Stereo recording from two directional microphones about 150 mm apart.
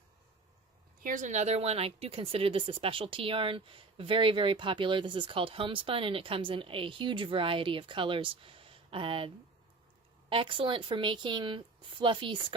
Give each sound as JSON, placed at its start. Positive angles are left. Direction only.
{"t": 1.0, "sound": "speech", "side_deg": -60}